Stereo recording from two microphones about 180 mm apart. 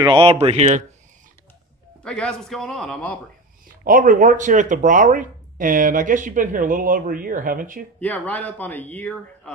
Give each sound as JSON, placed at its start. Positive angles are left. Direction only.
{"t": 0.0, "sound": "speech", "side_deg": -30}
{"t": 2.0, "sound": "a man's voice", "side_deg": 5}
{"t": 3.8, "sound": "speech", "side_deg": -50}
{"t": 8.0, "sound": "a man's voice", "side_deg": 10}